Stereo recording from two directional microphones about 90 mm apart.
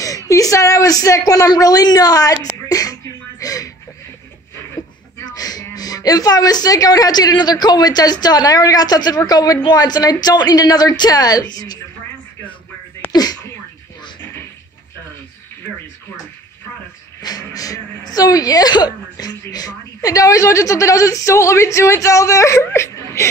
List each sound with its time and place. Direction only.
0.0 s a woman's voice: 40° left (ahead or behind)
4.8 s a sound: 50° left (ahead or behind)
5.3 s a woman's voice: 45° left (ahead or behind)
13.1 s speech: 45° left (ahead or behind)
17.2 s a woman's voice: 45° left (ahead or behind); by 23.2 s 30° left (ahead or behind)